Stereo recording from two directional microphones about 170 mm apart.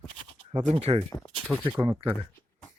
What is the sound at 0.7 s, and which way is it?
Speech, 35° right (ahead or behind).